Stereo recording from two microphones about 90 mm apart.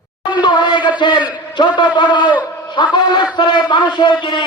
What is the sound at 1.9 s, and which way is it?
A man's voice, 55° left (ahead or behind).